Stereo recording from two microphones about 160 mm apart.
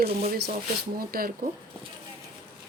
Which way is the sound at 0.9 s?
65° right (ahead or behind).